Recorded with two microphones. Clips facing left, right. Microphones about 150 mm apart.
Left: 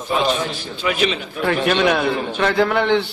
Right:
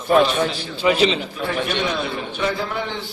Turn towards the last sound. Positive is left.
turn(degrees=70)  # may be behind; listen again after turning